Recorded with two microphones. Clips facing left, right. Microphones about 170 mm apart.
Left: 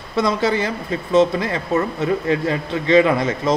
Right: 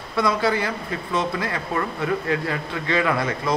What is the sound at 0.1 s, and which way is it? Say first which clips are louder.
A man's voice: left 3 dB; 25° left (ahead or behind).